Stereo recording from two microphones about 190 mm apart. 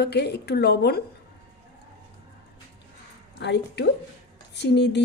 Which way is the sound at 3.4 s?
65° left (ahead or behind).